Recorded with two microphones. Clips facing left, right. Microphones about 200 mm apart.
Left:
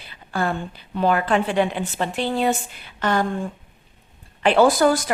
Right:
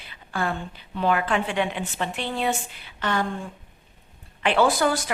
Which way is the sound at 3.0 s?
40° left (ahead or behind).